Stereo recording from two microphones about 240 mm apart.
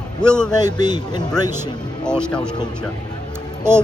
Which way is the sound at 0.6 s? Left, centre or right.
Centre.